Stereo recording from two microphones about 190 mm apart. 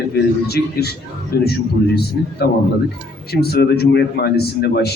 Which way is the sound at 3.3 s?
55° left (ahead or behind).